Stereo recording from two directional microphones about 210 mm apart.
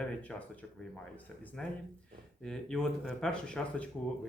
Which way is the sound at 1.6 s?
5° left (ahead or behind).